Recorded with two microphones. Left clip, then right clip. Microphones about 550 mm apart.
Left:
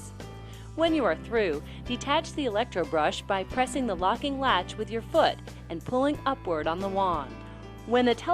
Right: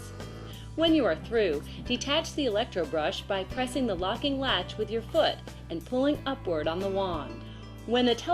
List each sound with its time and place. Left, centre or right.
0.8 s speech: left